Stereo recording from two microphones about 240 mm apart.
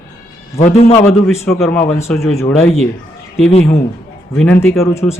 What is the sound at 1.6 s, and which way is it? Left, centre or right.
A man's voice, centre.